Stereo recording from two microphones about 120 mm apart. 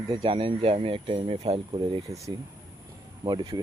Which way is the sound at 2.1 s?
30° right (ahead or behind).